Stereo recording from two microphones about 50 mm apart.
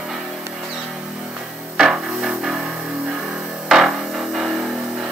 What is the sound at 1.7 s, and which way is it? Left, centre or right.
Music, centre.